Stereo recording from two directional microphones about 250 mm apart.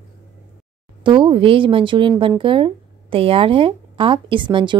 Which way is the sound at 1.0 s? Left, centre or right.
Centre.